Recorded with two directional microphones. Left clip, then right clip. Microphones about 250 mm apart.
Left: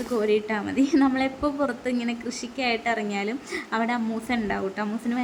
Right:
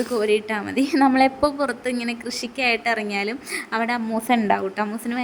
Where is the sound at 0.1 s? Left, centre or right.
Centre.